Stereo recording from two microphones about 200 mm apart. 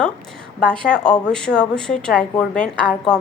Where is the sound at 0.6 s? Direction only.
5° left (ahead or behind).